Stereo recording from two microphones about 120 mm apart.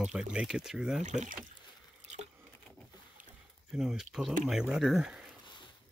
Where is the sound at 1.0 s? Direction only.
85° right.